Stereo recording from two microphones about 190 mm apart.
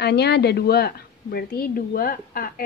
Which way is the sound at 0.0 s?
60° left (ahead or behind).